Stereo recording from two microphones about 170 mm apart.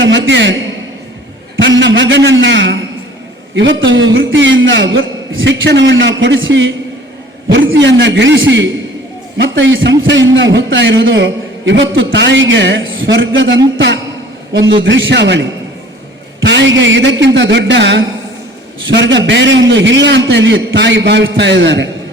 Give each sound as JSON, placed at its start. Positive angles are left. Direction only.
{"t": 0.0, "sound": "a man's voice", "side_deg": -90}
{"t": 1.5, "sound": "a man's voice", "side_deg": -90}